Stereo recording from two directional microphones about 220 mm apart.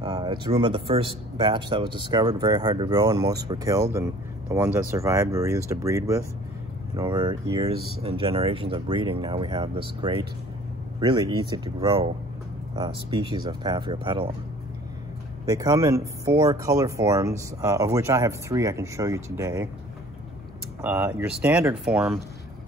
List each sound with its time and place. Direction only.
0.0 s speech: 20° right (ahead or behind)
15.4 s speech: 15° right (ahead or behind)
20.8 s speech: 10° right (ahead or behind)